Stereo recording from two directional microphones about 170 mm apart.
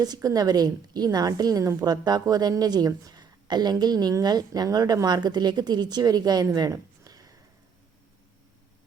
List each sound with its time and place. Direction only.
0.0 s a woman's voice: 20° right (ahead or behind)